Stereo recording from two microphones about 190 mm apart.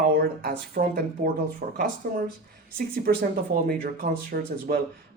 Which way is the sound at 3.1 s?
50° right (ahead or behind).